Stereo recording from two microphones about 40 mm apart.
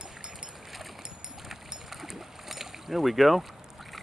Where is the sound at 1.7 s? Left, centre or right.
Centre.